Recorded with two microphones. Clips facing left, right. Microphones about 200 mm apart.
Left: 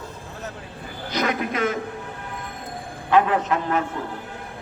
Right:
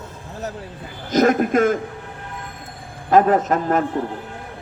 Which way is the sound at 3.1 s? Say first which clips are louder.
Right 4 dB; 45° right (ahead or behind).